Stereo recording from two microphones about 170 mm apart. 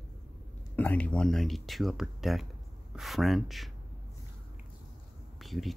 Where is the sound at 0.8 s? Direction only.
10° left (ahead or behind).